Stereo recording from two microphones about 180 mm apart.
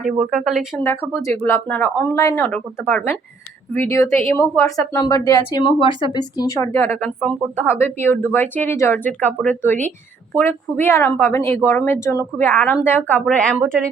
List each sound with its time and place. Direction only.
0.0 s a woman's voice: 5° right (ahead or behind)